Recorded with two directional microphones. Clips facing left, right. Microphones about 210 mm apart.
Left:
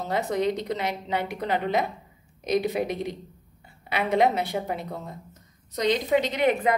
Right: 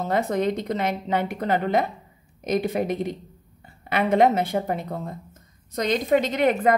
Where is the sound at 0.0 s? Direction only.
50° right (ahead or behind).